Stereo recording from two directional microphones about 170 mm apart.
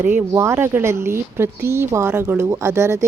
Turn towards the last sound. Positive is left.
turn(degrees=-15)  # may be behind; listen again after turning